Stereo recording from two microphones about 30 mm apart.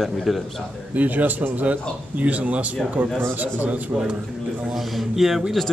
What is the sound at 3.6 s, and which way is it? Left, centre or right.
Speech, right.